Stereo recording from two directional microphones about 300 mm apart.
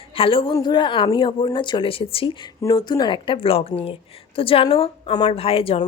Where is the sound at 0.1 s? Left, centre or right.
Centre.